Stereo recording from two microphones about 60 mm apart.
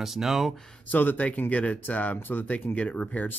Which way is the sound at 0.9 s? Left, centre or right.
Left.